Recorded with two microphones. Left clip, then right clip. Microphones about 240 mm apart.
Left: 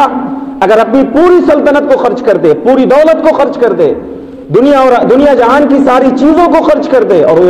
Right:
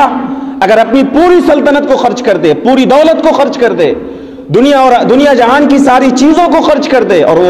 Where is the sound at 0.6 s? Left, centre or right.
Right.